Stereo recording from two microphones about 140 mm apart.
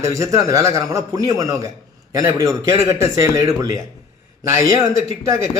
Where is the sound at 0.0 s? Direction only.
20° right (ahead or behind).